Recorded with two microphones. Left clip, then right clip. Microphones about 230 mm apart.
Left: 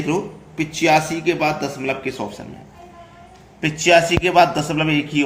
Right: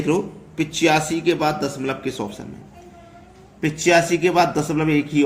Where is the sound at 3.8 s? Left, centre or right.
Centre.